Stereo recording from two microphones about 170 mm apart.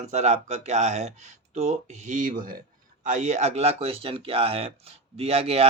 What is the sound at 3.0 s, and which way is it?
Speech, 45° right (ahead or behind).